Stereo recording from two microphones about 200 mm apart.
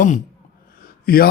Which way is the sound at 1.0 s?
50° left (ahead or behind).